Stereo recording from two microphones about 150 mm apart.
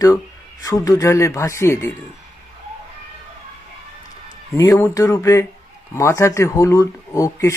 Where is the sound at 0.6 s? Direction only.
25° left (ahead or behind).